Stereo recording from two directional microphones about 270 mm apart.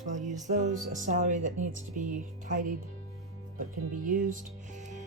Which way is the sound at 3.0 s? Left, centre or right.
Right.